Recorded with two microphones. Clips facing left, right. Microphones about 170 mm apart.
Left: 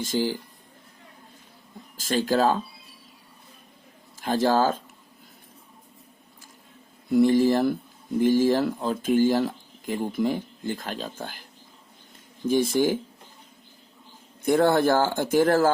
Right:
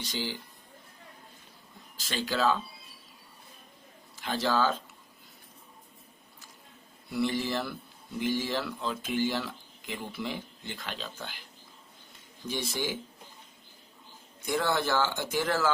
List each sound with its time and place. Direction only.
0.0 s speech: 45° left (ahead or behind)
2.0 s speech: 45° left (ahead or behind)
4.2 s speech: 45° left (ahead or behind)
7.1 s speech: 45° left (ahead or behind)
12.5 s speech: 50° left (ahead or behind)
14.4 s speech: 50° left (ahead or behind)